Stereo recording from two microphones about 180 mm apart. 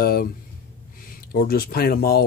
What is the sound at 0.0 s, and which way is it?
Speech, 55° left (ahead or behind).